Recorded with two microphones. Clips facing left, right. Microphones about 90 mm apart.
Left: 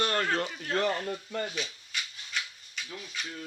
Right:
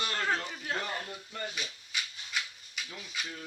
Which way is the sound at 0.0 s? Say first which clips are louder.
Left 6 dB; 55° left (ahead or behind).